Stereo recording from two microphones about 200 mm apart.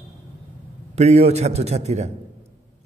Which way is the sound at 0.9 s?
30° right (ahead or behind).